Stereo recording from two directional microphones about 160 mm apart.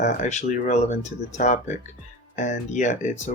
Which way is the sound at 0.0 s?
50° left (ahead or behind).